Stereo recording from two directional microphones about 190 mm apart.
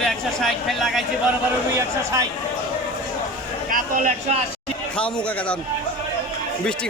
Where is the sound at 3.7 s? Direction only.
40° right (ahead or behind).